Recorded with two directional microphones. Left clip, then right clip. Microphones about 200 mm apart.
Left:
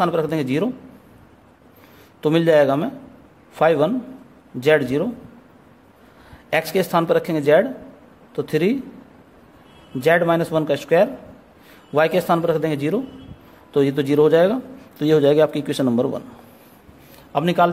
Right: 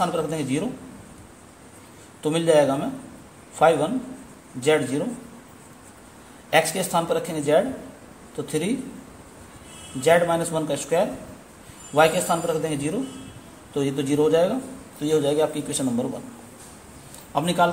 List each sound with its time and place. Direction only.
0.0 s a man's voice: 50° left (ahead or behind)
2.2 s a man's voice: 55° left (ahead or behind)
6.5 s a man's voice: 55° left (ahead or behind)
10.0 s a man's voice: 55° left (ahead or behind)
17.3 s a man's voice: 55° left (ahead or behind)